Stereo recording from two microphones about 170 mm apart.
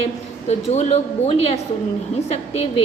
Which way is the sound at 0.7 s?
40° left (ahead or behind).